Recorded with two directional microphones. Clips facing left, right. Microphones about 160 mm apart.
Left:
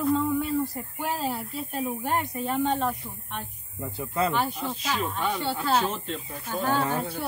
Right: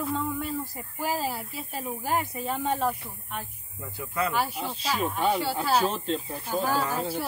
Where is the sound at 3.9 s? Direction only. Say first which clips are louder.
Left 3 dB; 25° left (ahead or behind).